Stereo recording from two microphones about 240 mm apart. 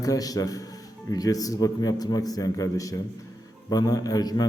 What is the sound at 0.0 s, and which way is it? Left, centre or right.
A man's voice, centre.